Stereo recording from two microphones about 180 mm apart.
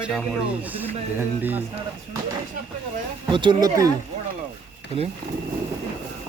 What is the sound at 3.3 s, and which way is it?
Speech, 25° right (ahead or behind).